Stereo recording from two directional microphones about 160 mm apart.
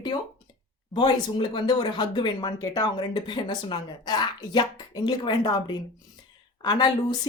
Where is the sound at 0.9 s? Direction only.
30° left (ahead or behind).